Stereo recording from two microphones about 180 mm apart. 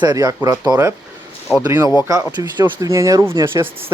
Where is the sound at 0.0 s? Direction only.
20° right (ahead or behind).